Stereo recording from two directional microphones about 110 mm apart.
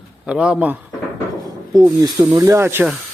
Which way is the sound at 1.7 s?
35° right (ahead or behind).